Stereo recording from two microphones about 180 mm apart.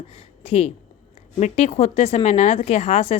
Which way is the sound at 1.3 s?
40° left (ahead or behind).